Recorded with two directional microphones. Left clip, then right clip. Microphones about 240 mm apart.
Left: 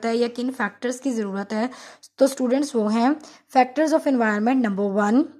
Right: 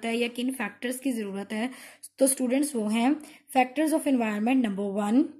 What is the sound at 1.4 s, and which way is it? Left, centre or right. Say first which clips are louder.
Speech: left 7 dB; left.